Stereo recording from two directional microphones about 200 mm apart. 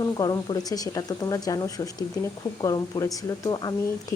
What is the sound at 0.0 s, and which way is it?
Speech, 20° left (ahead or behind).